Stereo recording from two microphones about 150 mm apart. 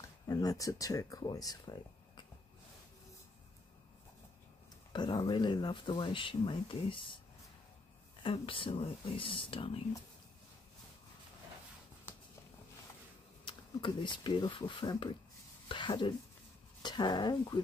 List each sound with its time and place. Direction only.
0.3 s speech: 25° left (ahead or behind)
4.9 s speech: 30° left (ahead or behind)
8.2 s speech: 35° left (ahead or behind)
13.5 s speech: 30° left (ahead or behind)